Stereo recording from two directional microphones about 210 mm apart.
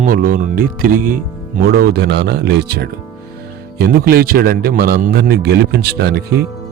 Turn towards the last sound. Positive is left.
turn(degrees=-50)  # may be behind; listen again after turning